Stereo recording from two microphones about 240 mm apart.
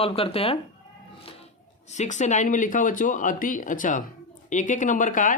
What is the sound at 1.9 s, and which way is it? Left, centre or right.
Speech, left.